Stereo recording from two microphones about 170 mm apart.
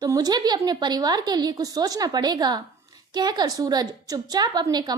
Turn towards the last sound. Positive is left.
turn(degrees=-25)  # may be behind; listen again after turning